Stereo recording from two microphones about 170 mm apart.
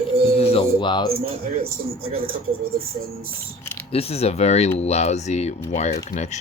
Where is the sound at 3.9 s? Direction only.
35° left (ahead or behind).